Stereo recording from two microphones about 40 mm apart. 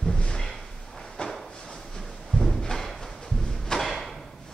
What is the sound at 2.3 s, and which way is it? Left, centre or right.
Drawer open or close, centre.